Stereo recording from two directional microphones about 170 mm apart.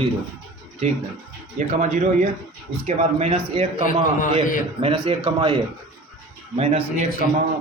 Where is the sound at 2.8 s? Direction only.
40° right (ahead or behind).